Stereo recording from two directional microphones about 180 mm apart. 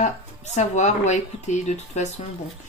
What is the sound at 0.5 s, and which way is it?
Speech, 40° left (ahead or behind).